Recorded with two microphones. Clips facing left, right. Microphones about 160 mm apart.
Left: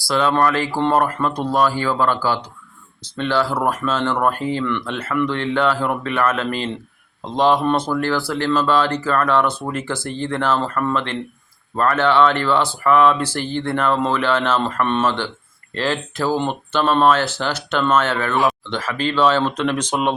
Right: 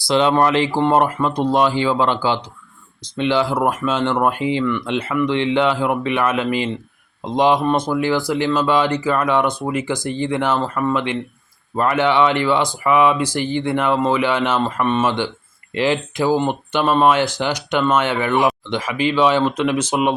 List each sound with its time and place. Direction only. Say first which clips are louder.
0.1 s speech: right 2 dB; 20° right (ahead or behind)